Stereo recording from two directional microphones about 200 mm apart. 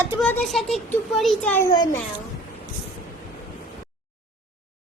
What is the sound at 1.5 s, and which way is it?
Speech, 15° left (ahead or behind).